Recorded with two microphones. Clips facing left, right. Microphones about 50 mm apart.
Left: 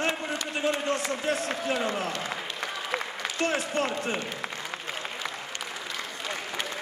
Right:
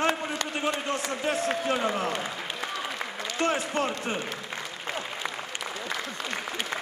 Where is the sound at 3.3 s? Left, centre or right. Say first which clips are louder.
Right 1 dB; right.